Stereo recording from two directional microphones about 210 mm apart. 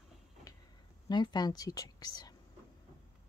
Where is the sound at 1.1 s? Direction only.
20° left (ahead or behind).